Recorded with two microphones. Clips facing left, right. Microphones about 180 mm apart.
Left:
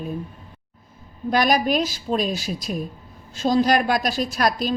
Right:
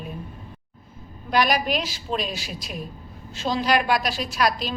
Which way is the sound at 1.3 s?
45° left (ahead or behind).